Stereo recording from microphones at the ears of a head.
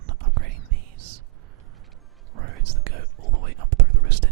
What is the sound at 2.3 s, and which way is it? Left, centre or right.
Whispering, right.